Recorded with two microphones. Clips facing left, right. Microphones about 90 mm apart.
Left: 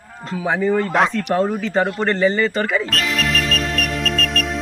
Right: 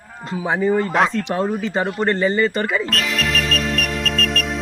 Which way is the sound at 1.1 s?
20° right (ahead or behind).